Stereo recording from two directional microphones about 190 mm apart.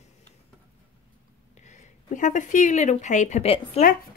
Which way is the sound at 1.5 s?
40° left (ahead or behind).